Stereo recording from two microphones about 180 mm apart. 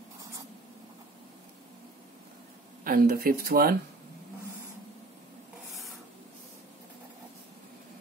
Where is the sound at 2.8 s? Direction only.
50° right (ahead or behind).